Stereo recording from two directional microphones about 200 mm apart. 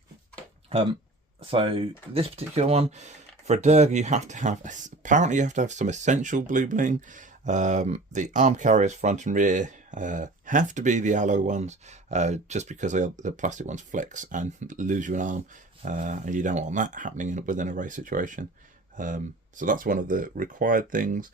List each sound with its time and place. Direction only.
1.4 s speech: 30° right (ahead or behind)